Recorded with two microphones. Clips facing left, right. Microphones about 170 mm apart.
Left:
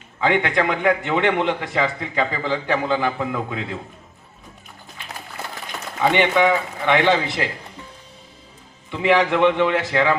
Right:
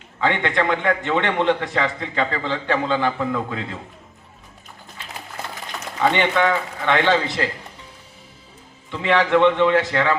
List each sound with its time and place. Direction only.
0.2 s a man's voice: 15° left (ahead or behind)
6.0 s a man's voice: 15° left (ahead or behind)
8.9 s a man's voice: 15° left (ahead or behind)